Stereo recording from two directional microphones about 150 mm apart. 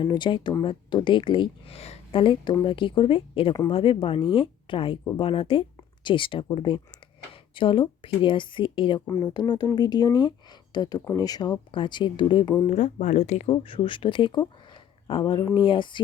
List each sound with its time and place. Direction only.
0.0 s speech: 30° left (ahead or behind)
12.7 s speech: 55° left (ahead or behind); by 16.0 s 35° left (ahead or behind)